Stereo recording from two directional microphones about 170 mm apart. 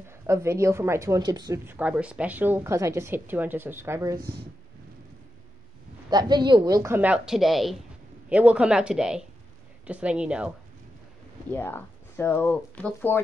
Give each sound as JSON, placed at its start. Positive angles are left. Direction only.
{"t": 0.3, "sound": "a woman's voice", "side_deg": -15}
{"t": 1.7, "sound": "a woman's voice", "side_deg": -10}
{"t": 6.0, "sound": "a woman's voice", "side_deg": -25}
{"t": 11.5, "sound": "speech", "side_deg": 10}